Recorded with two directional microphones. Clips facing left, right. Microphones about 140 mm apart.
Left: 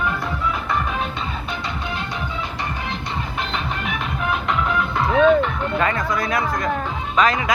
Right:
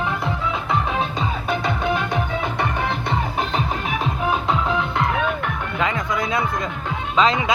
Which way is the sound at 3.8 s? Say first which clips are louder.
Right 2 dB; 30° right (ahead or behind).